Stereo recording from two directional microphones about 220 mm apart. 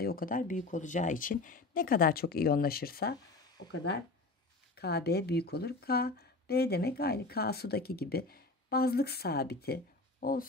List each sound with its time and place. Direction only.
0.0 s speech: 40° left (ahead or behind)